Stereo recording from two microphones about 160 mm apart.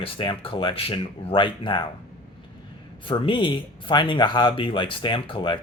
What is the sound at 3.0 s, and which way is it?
Speech, 30° left (ahead or behind).